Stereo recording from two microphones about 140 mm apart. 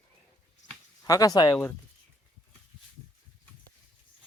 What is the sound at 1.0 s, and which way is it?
Speech, 25° left (ahead or behind).